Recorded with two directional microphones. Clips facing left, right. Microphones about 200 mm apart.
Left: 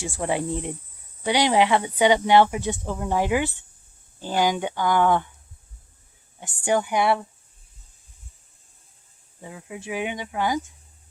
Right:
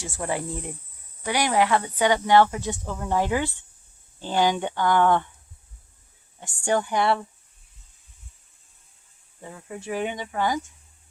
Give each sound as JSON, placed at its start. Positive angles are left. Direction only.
{"t": 0.0, "sound": "speech", "side_deg": 20}
{"t": 6.7, "sound": "speech", "side_deg": 10}
{"t": 9.4, "sound": "speech", "side_deg": 10}